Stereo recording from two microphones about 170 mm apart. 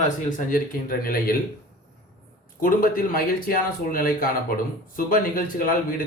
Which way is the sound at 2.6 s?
55° left (ahead or behind).